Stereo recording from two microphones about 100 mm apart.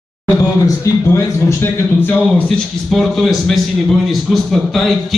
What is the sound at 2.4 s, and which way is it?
A man's voice, centre (ahead or behind).